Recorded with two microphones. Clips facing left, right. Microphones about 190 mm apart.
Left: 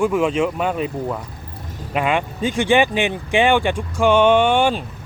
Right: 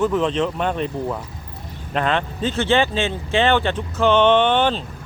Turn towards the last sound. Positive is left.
turn(degrees=10)  # may be behind; listen again after turning